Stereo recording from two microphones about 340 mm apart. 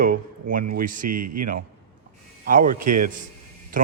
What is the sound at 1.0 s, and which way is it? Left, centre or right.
Speech, right.